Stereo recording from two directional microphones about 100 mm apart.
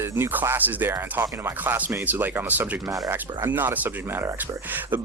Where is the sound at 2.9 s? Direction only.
35° right (ahead or behind).